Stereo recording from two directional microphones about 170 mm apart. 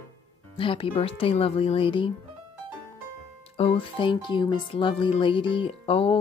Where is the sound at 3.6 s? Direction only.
30° left (ahead or behind).